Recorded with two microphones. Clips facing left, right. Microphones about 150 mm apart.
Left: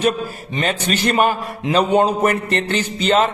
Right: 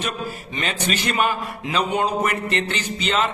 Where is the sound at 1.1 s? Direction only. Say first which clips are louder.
Left 6 dB; 40° left (ahead or behind).